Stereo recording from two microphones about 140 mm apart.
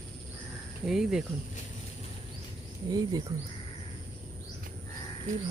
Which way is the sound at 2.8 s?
25° right (ahead or behind).